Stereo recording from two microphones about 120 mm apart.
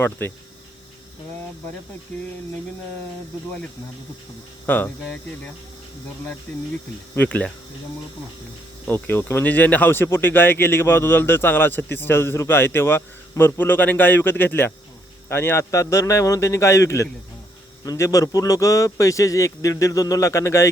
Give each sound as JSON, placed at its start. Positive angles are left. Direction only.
{"t": 0.0, "sound": "speech", "side_deg": 20}
{"t": 4.6, "sound": "speech", "side_deg": 15}
{"t": 7.2, "sound": "speech", "side_deg": 10}
{"t": 8.9, "sound": "speech", "side_deg": 15}